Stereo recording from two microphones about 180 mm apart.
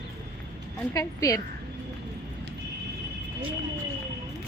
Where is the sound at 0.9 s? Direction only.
20° left (ahead or behind).